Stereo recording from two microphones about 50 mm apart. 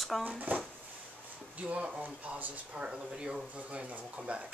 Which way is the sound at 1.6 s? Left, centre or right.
Right.